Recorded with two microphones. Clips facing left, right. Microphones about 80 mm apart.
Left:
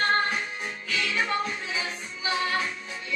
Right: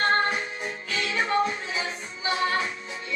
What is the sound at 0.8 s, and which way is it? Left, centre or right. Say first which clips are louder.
Music: even; right.